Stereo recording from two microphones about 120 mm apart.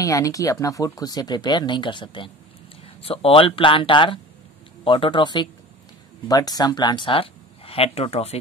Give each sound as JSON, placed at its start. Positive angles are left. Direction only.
{"t": 0.0, "sound": "speech", "side_deg": 30}